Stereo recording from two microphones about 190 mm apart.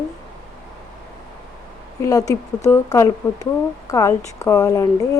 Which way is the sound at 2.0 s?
15° left (ahead or behind).